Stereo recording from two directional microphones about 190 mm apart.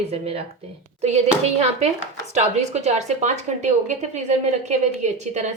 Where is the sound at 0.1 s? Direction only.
30° right (ahead or behind).